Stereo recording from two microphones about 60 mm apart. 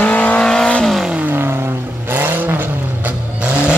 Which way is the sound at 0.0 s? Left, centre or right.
Left.